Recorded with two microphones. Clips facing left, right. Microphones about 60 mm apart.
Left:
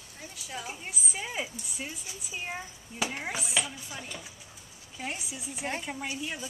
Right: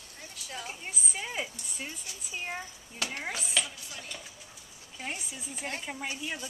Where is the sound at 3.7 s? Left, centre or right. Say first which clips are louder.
Left 3 dB; centre.